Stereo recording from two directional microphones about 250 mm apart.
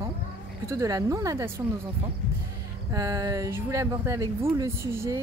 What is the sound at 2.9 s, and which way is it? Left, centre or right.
Speech, centre.